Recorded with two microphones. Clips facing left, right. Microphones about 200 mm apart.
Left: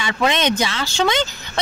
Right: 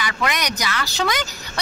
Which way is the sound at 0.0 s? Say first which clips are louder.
Left 5 dB; 25° left (ahead or behind).